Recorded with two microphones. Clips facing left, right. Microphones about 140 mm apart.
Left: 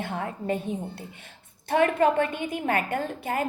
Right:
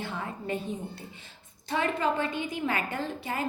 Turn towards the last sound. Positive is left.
turn(degrees=50)  # may be behind; listen again after turning